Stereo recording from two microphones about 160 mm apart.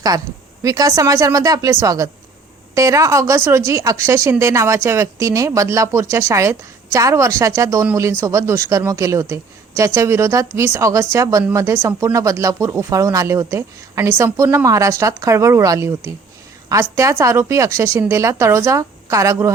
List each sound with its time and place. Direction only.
0.6 s a woman's voice: 20° right (ahead or behind)